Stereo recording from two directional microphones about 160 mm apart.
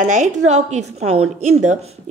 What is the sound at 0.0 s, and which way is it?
A woman's voice, 50° right (ahead or behind).